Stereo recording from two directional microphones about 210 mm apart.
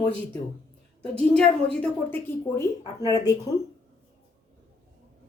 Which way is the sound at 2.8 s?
20° left (ahead or behind).